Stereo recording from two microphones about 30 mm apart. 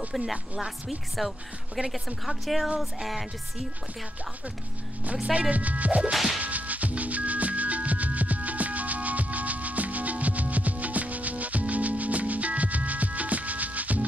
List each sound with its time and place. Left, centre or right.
0.1 s speech: centre
5.5 s speech: right
6.4 s music: right